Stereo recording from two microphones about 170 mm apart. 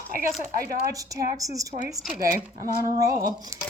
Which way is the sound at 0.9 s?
20° right (ahead or behind).